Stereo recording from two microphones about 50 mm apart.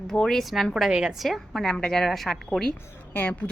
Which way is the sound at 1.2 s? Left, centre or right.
Centre.